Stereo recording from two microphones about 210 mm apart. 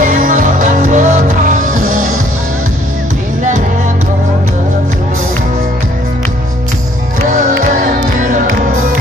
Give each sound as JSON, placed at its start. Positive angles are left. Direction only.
{"t": 0.1, "sound": "music", "side_deg": -35}
{"t": 7.3, "sound": "music", "side_deg": -35}